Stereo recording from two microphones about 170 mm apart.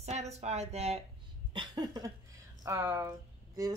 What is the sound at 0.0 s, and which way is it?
Speech, 40° right (ahead or behind).